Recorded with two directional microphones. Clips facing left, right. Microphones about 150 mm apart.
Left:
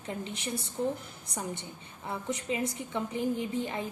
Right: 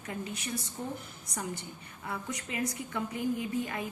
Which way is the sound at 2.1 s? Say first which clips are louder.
Left 5 dB; 25° left (ahead or behind).